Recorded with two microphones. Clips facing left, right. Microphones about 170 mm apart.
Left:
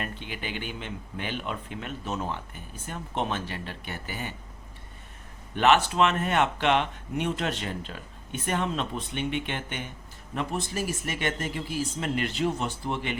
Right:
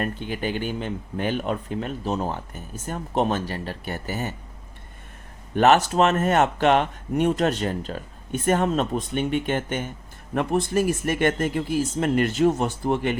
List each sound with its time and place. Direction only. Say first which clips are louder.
0.0 s speech: right 8 dB; 45° right (ahead or behind)
5.5 s speech: right 4 dB; 45° right (ahead or behind)
10.3 s speech: right 9 dB; 55° right (ahead or behind)